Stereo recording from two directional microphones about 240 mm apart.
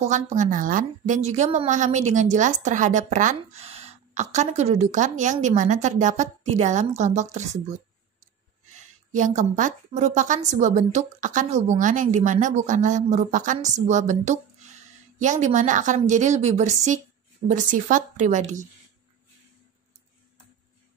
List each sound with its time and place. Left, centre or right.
0.0 s a woman's voice: right
9.1 s a woman's voice: right